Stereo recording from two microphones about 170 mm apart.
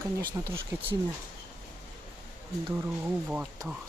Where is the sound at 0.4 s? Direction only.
15° right (ahead or behind).